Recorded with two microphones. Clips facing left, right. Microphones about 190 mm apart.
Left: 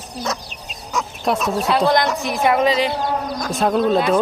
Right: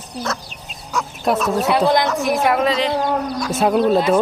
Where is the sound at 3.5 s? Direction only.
5° right (ahead or behind).